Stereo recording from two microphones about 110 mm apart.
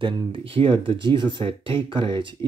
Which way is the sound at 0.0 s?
55° right (ahead or behind).